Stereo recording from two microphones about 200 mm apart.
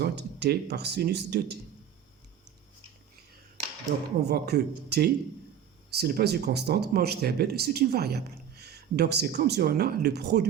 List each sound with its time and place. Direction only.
0.0 s speech: 55° right (ahead or behind)
4.2 s speech: 55° right (ahead or behind)